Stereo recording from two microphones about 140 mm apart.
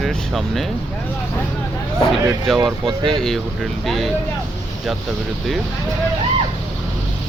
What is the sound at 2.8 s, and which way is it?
Speech, 40° right (ahead or behind).